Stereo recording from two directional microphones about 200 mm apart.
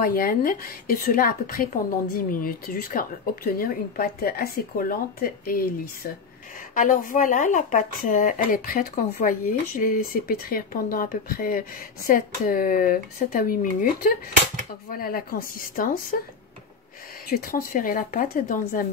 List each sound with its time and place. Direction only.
0.0 s speech: 45° left (ahead or behind)
6.7 s speech: 40° left (ahead or behind)
17.3 s speech: 45° left (ahead or behind)